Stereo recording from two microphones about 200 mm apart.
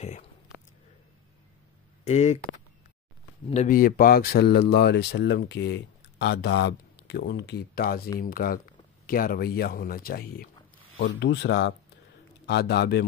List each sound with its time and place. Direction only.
0.0 s a sound: 35° left (ahead or behind)
2.0 s speech: 35° left (ahead or behind)
3.4 s speech: 35° left (ahead or behind); by 13.0 s 55° left (ahead or behind)